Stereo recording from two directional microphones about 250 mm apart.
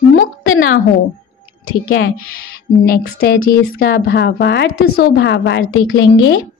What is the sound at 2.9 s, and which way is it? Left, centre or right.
A woman's voice, left.